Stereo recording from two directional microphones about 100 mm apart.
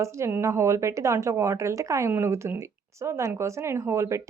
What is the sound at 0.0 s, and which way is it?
Speech, 30° right (ahead or behind).